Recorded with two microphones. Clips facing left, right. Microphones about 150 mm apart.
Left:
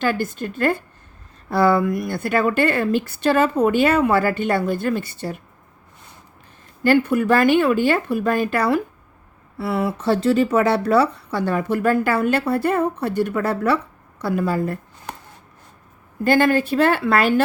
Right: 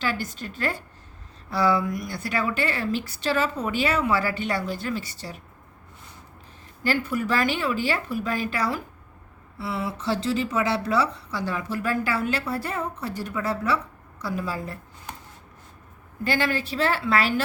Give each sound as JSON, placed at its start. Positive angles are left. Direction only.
{"t": 0.0, "sound": "a woman's voice", "side_deg": 50}
{"t": 6.8, "sound": "speech", "side_deg": 55}
{"t": 16.2, "sound": "a woman's voice", "side_deg": 50}